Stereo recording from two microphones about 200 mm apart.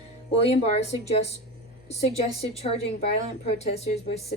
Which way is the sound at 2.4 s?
30° left (ahead or behind).